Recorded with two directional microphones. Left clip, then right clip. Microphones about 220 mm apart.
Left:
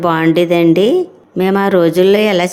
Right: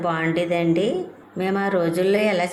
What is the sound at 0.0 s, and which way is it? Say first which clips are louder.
Speech: left 10 dB; 50° left (ahead or behind).